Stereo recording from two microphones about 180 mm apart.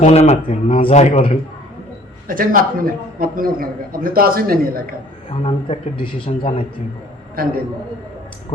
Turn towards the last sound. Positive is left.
turn(degrees=-55)  # may be behind; listen again after turning